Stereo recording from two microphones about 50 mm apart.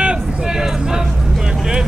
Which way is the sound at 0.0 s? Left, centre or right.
Centre.